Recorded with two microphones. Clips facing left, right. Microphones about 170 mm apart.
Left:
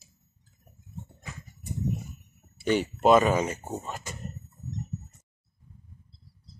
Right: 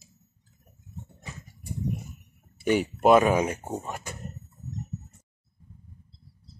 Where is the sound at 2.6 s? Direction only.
10° right (ahead or behind).